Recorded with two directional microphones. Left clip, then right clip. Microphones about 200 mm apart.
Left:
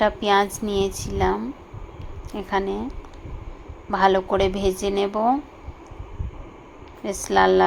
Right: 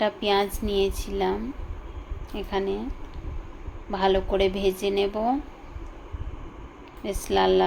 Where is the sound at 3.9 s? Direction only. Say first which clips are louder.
Left 5 dB; 15° left (ahead or behind).